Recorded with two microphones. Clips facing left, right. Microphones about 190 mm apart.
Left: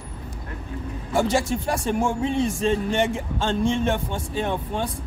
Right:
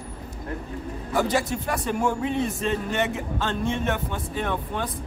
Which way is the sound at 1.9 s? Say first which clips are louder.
Left 1 dB; 25° left (ahead or behind).